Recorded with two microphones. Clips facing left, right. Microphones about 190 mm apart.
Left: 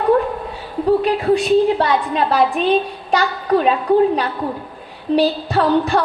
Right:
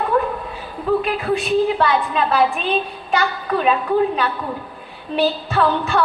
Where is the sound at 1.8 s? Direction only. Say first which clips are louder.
Left 1 dB; 40° left (ahead or behind).